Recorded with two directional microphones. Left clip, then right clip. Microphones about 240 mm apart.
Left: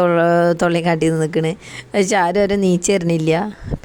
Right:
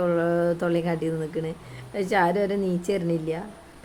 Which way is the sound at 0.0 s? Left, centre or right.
Left.